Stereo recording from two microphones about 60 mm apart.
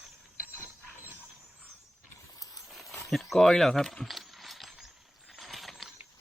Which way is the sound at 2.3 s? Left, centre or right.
Left.